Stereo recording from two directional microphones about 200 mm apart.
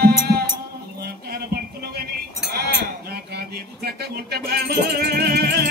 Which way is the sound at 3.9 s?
55° right (ahead or behind).